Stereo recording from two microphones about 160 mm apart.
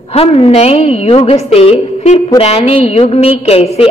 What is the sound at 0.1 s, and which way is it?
A woman's voice, 40° left (ahead or behind).